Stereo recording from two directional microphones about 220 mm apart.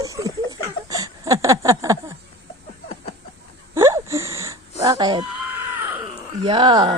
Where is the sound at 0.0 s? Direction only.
15° right (ahead or behind).